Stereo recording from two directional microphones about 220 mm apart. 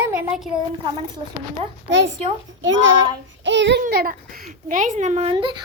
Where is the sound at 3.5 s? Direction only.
55° right (ahead or behind).